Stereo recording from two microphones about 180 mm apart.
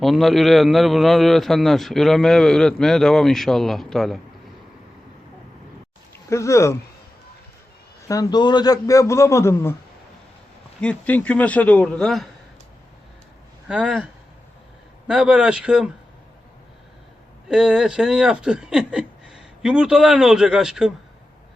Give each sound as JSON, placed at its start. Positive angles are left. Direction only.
{"t": 0.0, "sound": "a man's voice", "side_deg": 0}
{"t": 6.3, "sound": "a man's voice", "side_deg": 15}
{"t": 8.0, "sound": "a man's voice", "side_deg": 20}
{"t": 10.8, "sound": "a man's voice", "side_deg": 5}
{"t": 13.7, "sound": "a man's voice", "side_deg": -5}
{"t": 17.5, "sound": "a man's voice", "side_deg": -5}